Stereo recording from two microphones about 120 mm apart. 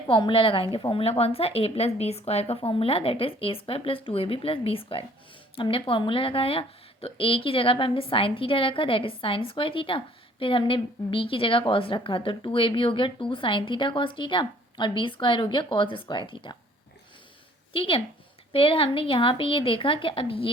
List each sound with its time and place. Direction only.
0.1 s a woman's voice: 40° left (ahead or behind)
17.7 s a woman's voice: 50° left (ahead or behind)